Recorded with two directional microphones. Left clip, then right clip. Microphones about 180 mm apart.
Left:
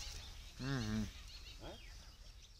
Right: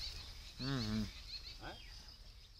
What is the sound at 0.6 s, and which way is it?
Speech, 5° right (ahead or behind).